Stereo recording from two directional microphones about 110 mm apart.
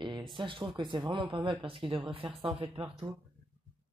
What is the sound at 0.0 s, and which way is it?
Speech, 45° right (ahead or behind).